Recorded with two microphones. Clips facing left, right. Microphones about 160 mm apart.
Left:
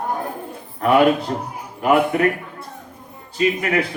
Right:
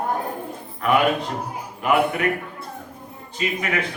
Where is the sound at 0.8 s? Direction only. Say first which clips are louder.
Left 4 dB; 35° left (ahead or behind).